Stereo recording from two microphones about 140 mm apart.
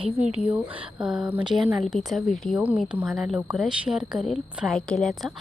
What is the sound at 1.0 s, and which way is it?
Speech, 5° right (ahead or behind).